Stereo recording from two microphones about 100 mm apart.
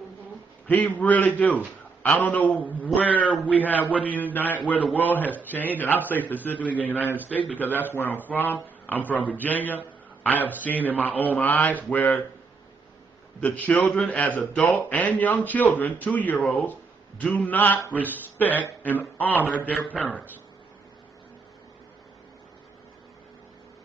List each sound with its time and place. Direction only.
0.7 s a man's voice: 15° left (ahead or behind)
13.4 s a man's voice: 15° left (ahead or behind)